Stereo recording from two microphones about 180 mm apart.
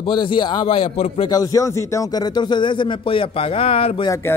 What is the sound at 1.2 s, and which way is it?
Speech, 20° left (ahead or behind).